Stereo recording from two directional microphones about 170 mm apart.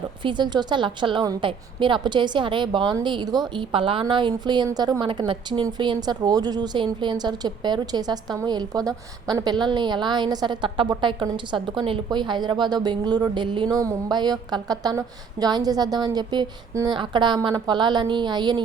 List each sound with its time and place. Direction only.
0.2 s a woman's voice: 25° right (ahead or behind)